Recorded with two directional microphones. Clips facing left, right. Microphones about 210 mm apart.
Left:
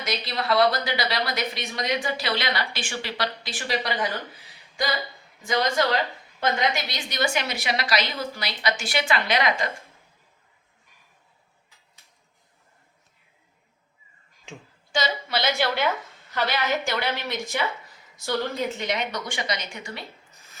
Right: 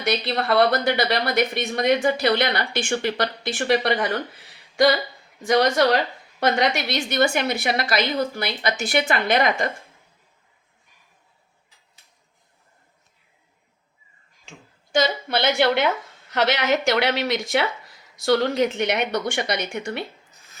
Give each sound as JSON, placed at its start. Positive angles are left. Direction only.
{"t": 0.0, "sound": "speech", "side_deg": -60}
{"t": 5.5, "sound": "a woman's voice", "side_deg": -70}
{"t": 14.9, "sound": "speech", "side_deg": -55}
{"t": 16.3, "sound": "speech", "side_deg": -75}